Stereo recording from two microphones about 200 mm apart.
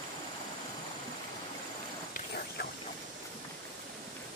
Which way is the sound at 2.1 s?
50° left (ahead or behind).